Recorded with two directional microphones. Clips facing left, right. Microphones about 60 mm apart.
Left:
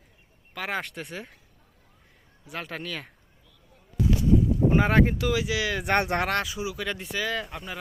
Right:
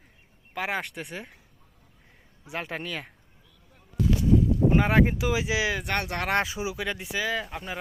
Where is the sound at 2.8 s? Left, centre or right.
Centre.